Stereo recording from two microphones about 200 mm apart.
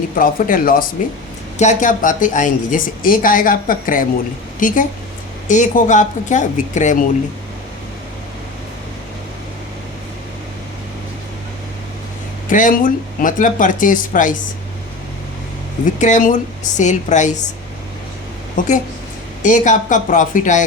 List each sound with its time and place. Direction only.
0.2 s a woman's voice: 45° left (ahead or behind)
12.5 s speech: 40° left (ahead or behind)
16.0 s speech: 40° left (ahead or behind)
18.6 s speech: 40° left (ahead or behind)